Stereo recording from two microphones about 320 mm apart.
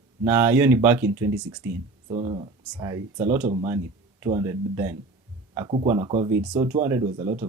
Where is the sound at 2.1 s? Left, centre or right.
Centre.